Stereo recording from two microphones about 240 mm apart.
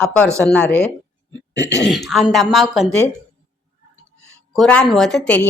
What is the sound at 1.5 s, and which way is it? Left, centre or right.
Speech, left.